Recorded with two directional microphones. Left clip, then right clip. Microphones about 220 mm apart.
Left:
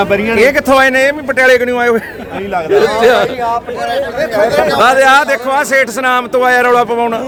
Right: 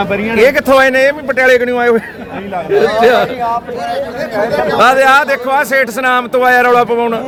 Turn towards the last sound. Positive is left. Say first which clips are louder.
# even
turn(degrees=0)  # may be behind; listen again after turning